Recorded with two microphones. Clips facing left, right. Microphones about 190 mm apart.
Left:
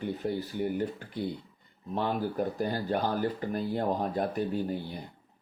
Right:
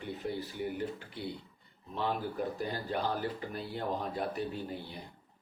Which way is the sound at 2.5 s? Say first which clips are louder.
Left 5 dB; 45° left (ahead or behind).